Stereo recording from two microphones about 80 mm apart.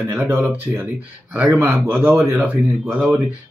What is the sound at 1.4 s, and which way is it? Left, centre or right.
Speech, right.